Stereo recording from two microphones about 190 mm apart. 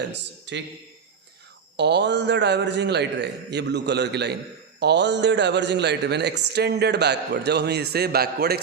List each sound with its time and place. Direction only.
0.5 s a man's voice: 70° right (ahead or behind)
1.7 s a man's voice: 65° right (ahead or behind)